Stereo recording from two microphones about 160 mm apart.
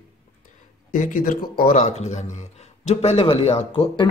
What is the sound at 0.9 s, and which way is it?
Speech, 55° left (ahead or behind).